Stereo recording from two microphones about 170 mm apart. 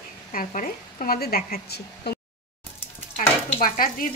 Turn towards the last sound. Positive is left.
turn(degrees=55)  # may be behind; listen again after turning